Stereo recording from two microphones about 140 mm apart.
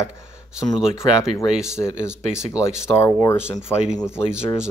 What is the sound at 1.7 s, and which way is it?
Speech, 20° left (ahead or behind).